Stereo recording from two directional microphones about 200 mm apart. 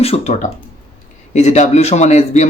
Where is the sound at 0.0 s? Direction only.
30° left (ahead or behind).